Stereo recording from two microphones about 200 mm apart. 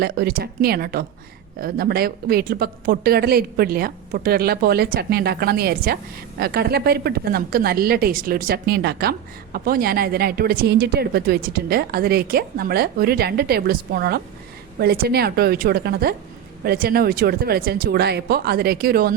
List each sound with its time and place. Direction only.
0.0 s a woman's voice: 50° right (ahead or behind)